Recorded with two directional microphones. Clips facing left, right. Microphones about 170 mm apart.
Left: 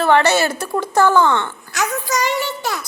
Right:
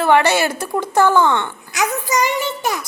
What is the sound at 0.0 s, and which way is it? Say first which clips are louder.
A woman's voice: even; 15° right (ahead or behind).